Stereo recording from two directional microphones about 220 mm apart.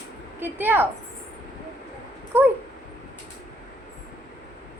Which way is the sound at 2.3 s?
10° right (ahead or behind).